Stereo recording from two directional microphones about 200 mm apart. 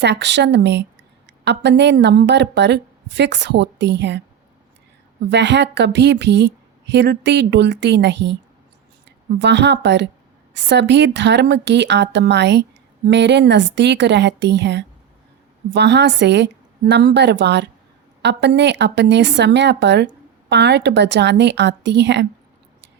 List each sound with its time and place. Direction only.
0.0 s a woman's voice: 60° right (ahead or behind)
5.3 s a woman's voice: 60° right (ahead or behind)